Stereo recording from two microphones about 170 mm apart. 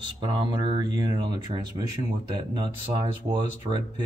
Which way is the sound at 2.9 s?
25° right (ahead or behind).